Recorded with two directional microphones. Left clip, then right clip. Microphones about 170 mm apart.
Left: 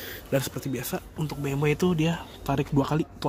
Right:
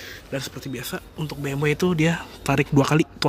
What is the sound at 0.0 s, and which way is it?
Speech, 25° left (ahead or behind).